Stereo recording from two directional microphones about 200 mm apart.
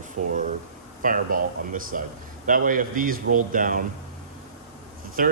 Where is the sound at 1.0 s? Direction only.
45° right (ahead or behind).